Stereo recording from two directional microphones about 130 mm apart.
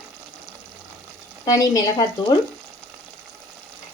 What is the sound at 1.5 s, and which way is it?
Speech, 25° left (ahead or behind).